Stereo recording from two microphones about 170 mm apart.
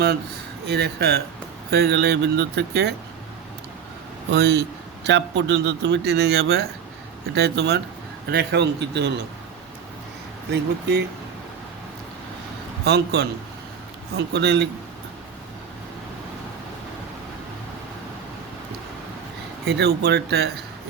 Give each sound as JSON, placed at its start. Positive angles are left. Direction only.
{"t": 0.7, "sound": "speech", "side_deg": -75}
{"t": 4.3, "sound": "speech", "side_deg": -80}
{"t": 5.0, "sound": "a man's voice", "side_deg": -90}
{"t": 10.5, "sound": "a man's voice", "side_deg": -90}
{"t": 12.8, "sound": "a man's voice", "side_deg": -75}
{"t": 14.3, "sound": "speech", "side_deg": -90}
{"t": 19.6, "sound": "speech", "side_deg": -75}